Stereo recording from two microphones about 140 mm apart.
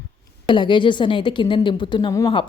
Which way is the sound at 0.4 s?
35° left (ahead or behind).